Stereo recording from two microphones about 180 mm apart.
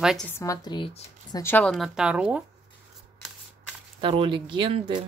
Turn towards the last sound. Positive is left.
turn(degrees=-30)  # may be behind; listen again after turning